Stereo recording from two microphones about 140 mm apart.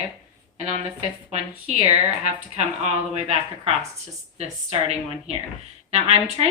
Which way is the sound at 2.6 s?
55° right (ahead or behind).